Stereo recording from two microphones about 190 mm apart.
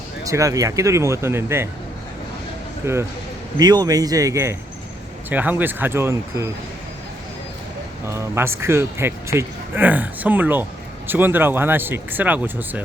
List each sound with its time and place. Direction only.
0.3 s a man's voice: 15° right (ahead or behind)
2.8 s a man's voice: 15° right (ahead or behind)
8.0 s a man's voice: 15° right (ahead or behind)